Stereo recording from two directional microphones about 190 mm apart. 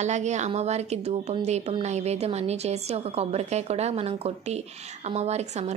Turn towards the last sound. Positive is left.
turn(degrees=-35)  # may be behind; listen again after turning